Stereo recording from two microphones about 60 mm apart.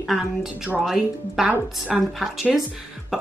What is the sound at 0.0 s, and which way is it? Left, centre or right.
Speech, centre.